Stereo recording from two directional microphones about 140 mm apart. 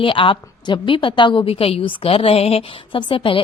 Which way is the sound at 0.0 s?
40° left (ahead or behind).